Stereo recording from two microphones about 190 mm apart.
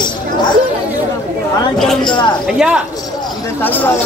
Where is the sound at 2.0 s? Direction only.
25° left (ahead or behind).